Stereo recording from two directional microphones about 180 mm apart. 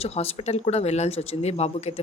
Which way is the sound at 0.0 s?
35° left (ahead or behind).